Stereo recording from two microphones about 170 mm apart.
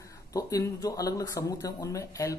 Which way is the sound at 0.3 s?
20° left (ahead or behind).